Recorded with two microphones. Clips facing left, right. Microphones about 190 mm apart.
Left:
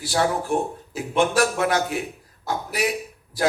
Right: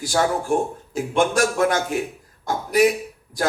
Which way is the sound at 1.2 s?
45° right (ahead or behind).